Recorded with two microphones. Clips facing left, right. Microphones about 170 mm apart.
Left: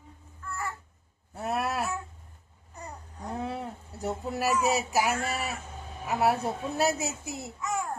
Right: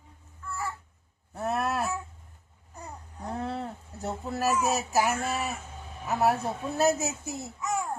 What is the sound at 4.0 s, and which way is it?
Speech, 15° left (ahead or behind).